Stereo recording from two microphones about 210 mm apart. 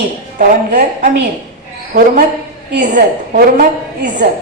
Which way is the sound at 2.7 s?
40° right (ahead or behind).